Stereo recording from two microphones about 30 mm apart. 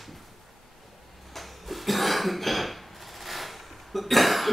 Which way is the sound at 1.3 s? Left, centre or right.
Centre.